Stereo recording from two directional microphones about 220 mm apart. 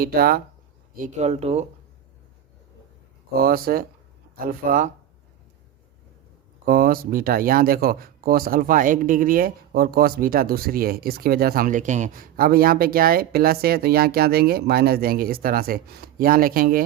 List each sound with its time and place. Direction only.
0.0 s speech: 45° right (ahead or behind)
3.3 s speech: 45° right (ahead or behind)
6.7 s speech: 40° right (ahead or behind)